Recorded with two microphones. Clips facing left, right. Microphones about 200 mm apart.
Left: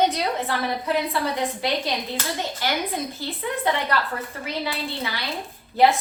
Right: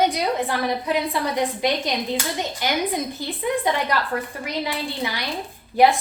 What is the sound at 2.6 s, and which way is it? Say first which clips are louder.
Speech: right 1 dB; 15° right (ahead or behind).